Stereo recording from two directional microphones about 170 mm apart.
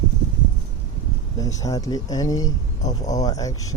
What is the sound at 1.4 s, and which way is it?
Speech, 20° left (ahead or behind).